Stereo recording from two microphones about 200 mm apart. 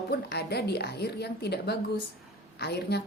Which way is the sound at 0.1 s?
55° left (ahead or behind).